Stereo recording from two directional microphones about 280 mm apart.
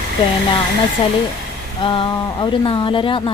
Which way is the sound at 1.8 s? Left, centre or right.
Centre.